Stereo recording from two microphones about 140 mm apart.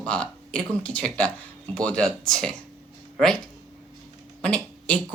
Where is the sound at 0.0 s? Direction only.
5° left (ahead or behind).